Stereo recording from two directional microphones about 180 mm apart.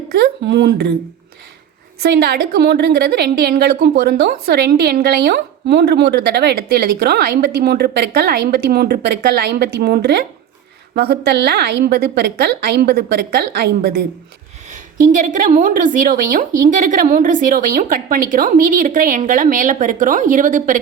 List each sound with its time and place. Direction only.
0.1 s speech: 60° right (ahead or behind)
2.0 s a woman's voice: 65° right (ahead or behind)
14.7 s a woman's voice: 45° right (ahead or behind)